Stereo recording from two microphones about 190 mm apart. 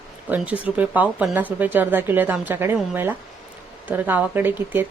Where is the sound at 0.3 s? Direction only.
10° right (ahead or behind).